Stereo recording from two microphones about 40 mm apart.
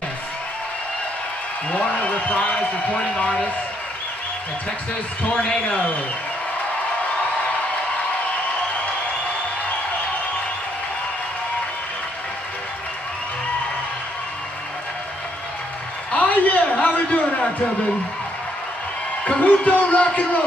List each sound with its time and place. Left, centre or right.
1.7 s a man's voice: left
5.3 s a man's voice: left
16.1 s a sound: left
19.2 s a man's voice: left